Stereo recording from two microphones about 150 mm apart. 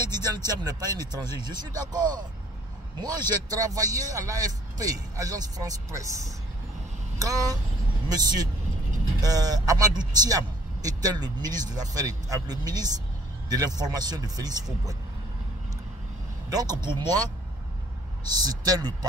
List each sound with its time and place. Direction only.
0.0 s a man's voice: 25° right (ahead or behind)
16.4 s a man's voice: 25° right (ahead or behind)
18.4 s a man's voice: 25° right (ahead or behind)